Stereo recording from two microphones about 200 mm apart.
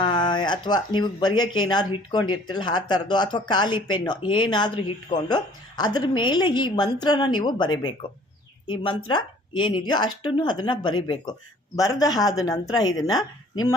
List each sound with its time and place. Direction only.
0.0 s speech: 20° left (ahead or behind)